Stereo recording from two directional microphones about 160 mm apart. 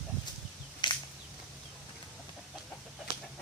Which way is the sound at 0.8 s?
30° left (ahead or behind).